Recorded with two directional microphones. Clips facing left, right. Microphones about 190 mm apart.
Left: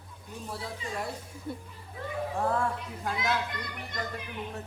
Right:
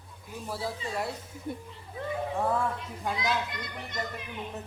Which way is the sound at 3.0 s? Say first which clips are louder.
Even; 20° right (ahead or behind).